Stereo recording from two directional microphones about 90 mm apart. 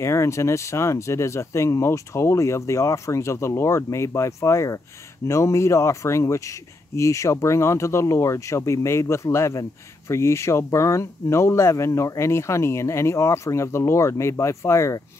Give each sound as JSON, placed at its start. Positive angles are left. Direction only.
{"t": 0.0, "sound": "speech", "side_deg": 30}